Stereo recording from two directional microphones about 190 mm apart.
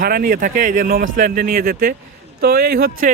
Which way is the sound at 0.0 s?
50° right (ahead or behind).